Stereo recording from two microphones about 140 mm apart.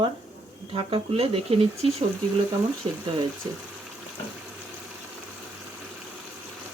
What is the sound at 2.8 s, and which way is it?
Speech, 35° right (ahead or behind).